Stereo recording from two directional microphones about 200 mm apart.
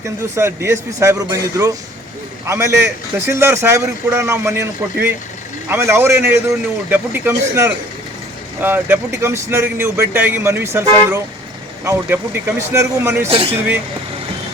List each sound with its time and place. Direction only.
0.0 s speech: 15° right (ahead or behind)
13.2 s speech: 30° right (ahead or behind)